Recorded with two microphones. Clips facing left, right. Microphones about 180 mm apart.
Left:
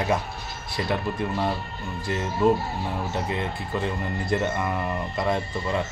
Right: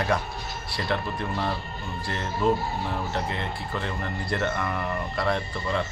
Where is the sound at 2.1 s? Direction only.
15° left (ahead or behind).